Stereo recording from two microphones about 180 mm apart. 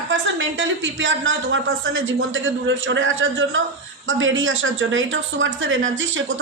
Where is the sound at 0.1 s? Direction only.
80° right.